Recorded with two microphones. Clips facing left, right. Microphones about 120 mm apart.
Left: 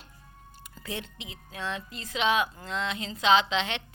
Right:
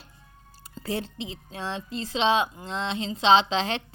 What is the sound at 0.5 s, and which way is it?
A woman's voice, 30° right (ahead or behind).